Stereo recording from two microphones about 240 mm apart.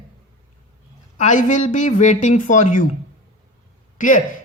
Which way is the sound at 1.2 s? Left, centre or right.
Left.